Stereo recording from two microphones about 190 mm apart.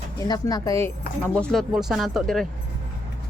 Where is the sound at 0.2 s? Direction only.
20° left (ahead or behind).